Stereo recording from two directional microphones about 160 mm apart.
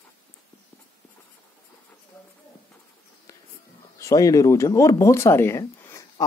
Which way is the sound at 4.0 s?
20° left (ahead or behind).